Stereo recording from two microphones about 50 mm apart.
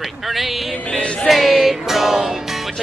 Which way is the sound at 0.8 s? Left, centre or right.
Left.